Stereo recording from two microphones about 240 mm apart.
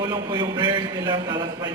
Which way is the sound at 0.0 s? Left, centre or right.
Centre.